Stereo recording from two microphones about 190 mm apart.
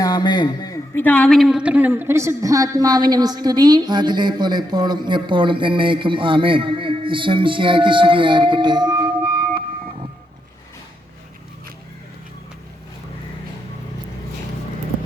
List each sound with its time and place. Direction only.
0.0 s a man's voice: 20° left (ahead or behind); by 9.6 s 25° right (ahead or behind)